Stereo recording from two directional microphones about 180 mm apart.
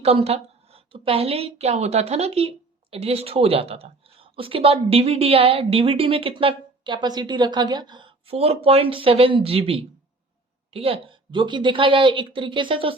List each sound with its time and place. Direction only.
0.0 s a woman's voice: 35° right (ahead or behind)